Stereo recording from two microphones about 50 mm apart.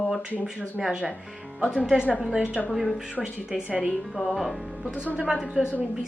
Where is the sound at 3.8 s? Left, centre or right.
Centre.